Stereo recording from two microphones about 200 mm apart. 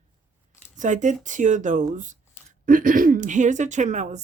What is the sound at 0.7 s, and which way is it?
Speech, 40° right (ahead or behind).